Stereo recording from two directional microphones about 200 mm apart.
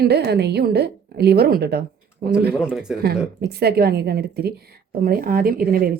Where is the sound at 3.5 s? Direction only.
50° right (ahead or behind).